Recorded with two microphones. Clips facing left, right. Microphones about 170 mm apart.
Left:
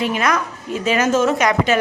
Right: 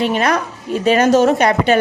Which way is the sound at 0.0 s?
30° right (ahead or behind).